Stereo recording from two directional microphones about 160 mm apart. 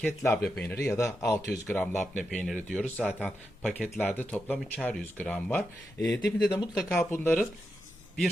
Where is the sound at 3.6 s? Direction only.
Centre (ahead or behind).